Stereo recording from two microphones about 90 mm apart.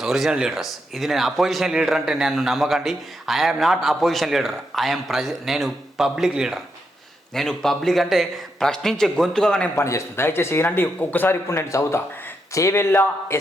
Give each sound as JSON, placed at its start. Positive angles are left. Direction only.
{"t": 0.0, "sound": "speech", "side_deg": -5}
{"t": 7.3, "sound": "speech", "side_deg": 5}
{"t": 9.7, "sound": "a man's voice", "side_deg": 30}